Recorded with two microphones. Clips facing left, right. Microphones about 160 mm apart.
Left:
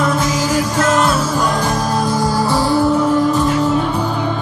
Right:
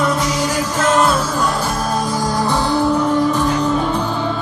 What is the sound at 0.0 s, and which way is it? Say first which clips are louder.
Music: left 1 dB; 5° left (ahead or behind).